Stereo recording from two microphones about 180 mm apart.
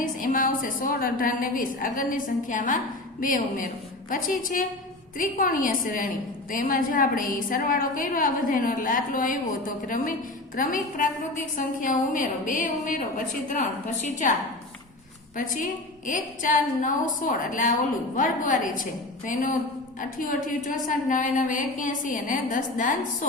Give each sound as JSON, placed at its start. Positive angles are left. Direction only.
{"t": 0.0, "sound": "a woman's voice", "side_deg": 50}
{"t": 15.4, "sound": "a woman's voice", "side_deg": 50}